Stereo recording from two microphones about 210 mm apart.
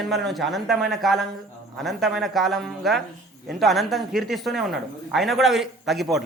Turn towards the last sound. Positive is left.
turn(degrees=0)  # may be behind; listen again after turning